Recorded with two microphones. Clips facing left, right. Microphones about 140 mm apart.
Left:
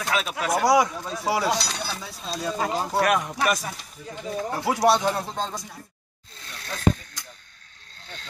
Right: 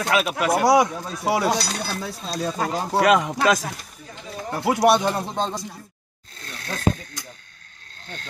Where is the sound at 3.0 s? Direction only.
90° right.